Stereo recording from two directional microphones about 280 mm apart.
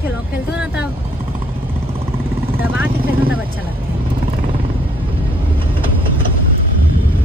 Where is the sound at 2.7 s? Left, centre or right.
Centre.